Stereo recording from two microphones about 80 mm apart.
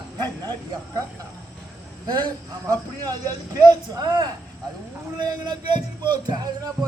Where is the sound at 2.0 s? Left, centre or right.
Right.